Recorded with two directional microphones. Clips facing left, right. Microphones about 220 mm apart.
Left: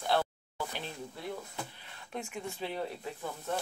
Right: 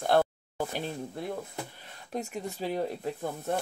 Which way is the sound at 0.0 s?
50° right (ahead or behind).